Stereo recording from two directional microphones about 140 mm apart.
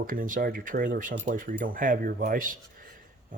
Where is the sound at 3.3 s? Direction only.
75° right (ahead or behind).